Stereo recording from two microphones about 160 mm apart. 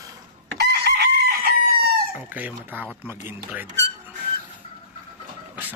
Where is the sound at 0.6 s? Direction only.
90° right.